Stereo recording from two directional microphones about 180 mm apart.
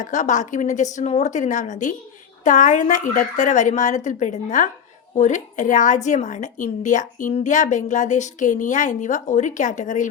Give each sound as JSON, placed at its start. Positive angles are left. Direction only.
{"t": 0.0, "sound": "a woman's voice", "side_deg": 45}